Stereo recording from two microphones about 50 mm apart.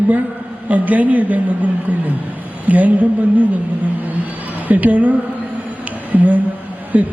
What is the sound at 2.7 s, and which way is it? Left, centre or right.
Speech, right.